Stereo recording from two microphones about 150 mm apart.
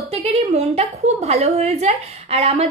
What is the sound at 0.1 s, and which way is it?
A woman's voice, 45° right (ahead or behind).